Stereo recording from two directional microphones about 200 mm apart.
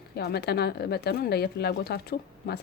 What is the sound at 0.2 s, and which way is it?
Speech, 55° left (ahead or behind).